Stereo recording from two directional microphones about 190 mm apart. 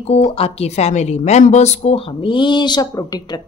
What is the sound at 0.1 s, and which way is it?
A woman's voice, 30° left (ahead or behind).